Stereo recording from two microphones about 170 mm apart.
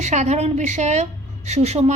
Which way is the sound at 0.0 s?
40° right (ahead or behind).